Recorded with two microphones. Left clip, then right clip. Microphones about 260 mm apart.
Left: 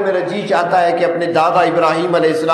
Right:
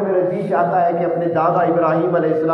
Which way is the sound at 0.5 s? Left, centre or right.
Left.